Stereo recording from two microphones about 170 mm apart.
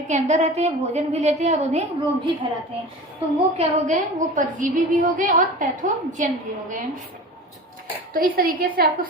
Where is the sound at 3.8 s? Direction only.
45° right (ahead or behind).